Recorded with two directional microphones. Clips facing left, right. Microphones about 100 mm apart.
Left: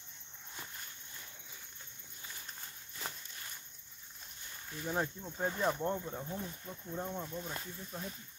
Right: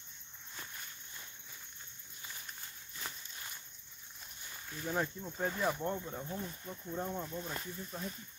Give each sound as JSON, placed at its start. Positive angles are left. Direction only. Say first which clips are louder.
{"t": 4.8, "sound": "speech", "louder": "even", "side_deg": 15}
{"t": 5.4, "sound": "speech", "louder": "left 1 dB", "side_deg": 5}